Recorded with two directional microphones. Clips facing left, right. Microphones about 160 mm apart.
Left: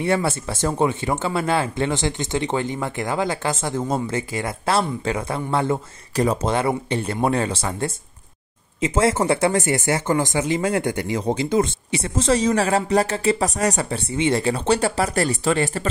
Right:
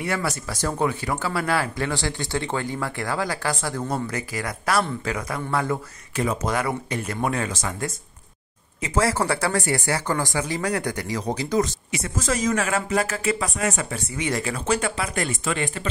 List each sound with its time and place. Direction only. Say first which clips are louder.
0.0 s speech: left 5 dB; 25° left (ahead or behind)